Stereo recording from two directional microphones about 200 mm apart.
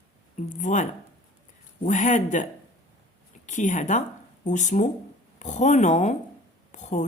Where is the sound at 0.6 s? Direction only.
40° left (ahead or behind).